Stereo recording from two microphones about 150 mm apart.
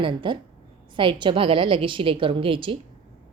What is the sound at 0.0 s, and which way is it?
A woman's voice, 35° right (ahead or behind).